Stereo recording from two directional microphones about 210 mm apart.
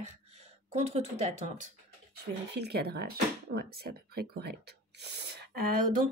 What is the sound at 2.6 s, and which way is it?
Speech, 50° right (ahead or behind).